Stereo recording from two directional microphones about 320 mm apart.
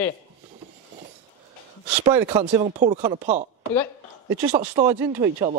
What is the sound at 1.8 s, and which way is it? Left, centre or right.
Speech, centre.